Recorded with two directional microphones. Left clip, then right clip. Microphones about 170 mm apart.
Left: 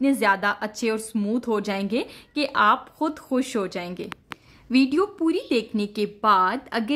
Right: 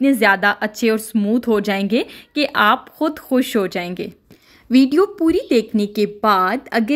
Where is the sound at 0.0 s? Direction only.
20° right (ahead or behind).